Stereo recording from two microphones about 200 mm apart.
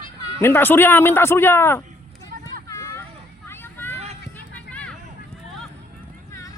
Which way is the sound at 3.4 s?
10° left (ahead or behind).